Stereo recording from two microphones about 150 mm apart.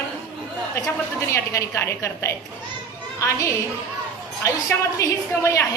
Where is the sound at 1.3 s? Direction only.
20° left (ahead or behind).